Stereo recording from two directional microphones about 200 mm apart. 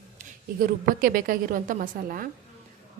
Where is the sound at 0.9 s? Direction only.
45° right (ahead or behind).